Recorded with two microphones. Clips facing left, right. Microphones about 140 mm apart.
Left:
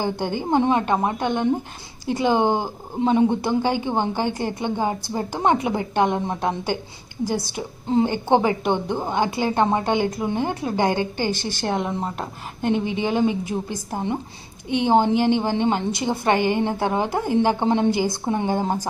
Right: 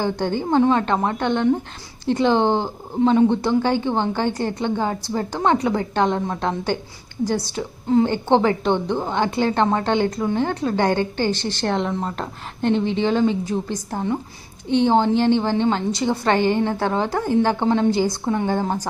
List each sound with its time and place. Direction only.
0.0 s speech: 15° left (ahead or behind)